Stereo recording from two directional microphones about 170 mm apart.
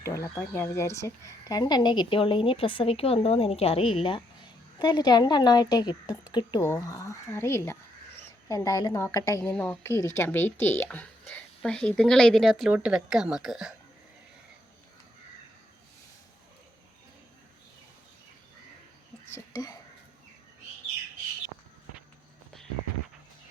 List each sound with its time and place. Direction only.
0.0 s a woman's voice: 15° left (ahead or behind)
9.4 s speech: 5° left (ahead or behind)
19.3 s whispering: 20° left (ahead or behind)